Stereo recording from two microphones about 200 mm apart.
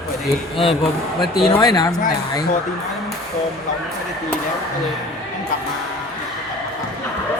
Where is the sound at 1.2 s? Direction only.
Centre (ahead or behind).